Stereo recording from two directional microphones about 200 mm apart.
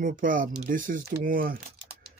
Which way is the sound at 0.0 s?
40° right (ahead or behind).